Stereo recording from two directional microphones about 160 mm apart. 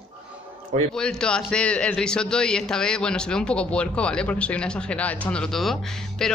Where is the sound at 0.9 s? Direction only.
5° left (ahead or behind).